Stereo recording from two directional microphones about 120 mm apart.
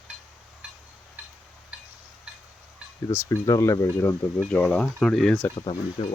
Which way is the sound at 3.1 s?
30° left (ahead or behind).